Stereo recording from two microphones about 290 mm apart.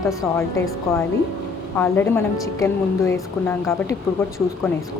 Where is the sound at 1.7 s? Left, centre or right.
Centre.